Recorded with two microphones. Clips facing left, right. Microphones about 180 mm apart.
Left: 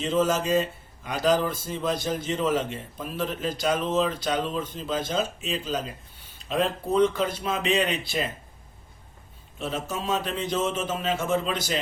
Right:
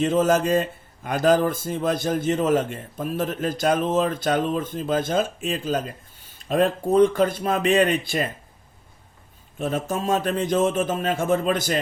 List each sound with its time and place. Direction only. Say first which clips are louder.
0.0 s a man's voice: right 5 dB; 50° right (ahead or behind)
9.6 s a man's voice: right 5 dB; 50° right (ahead or behind)